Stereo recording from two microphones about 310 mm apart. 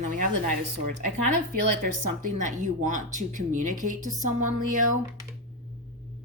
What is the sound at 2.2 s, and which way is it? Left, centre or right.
Speech, right.